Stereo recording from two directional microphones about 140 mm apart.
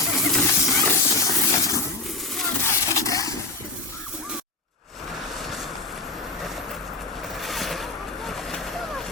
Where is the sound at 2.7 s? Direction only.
25° left (ahead or behind).